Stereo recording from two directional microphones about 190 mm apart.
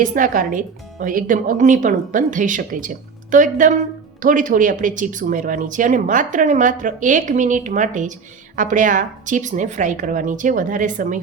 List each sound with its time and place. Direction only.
0.0 s speech: 45° right (ahead or behind)